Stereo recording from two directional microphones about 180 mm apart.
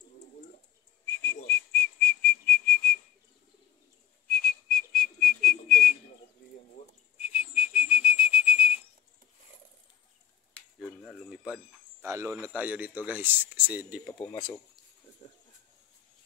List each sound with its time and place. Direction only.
1.5 s whistling: 10° left (ahead or behind)
4.3 s whistling: 5° left (ahead or behind)
7.2 s whistle: 5° right (ahead or behind)
10.5 s speech: 5° left (ahead or behind)
15.2 s a sound: 35° left (ahead or behind)